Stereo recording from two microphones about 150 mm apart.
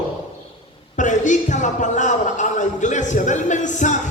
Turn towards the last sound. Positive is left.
turn(degrees=55)  # may be behind; listen again after turning